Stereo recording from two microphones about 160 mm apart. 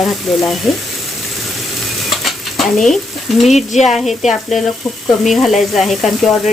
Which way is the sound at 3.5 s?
45° left (ahead or behind).